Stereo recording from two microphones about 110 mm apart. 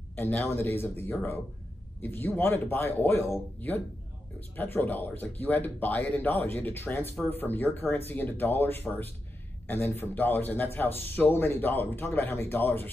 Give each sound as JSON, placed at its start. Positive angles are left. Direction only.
{"t": 0.1, "sound": "a man's voice", "side_deg": 15}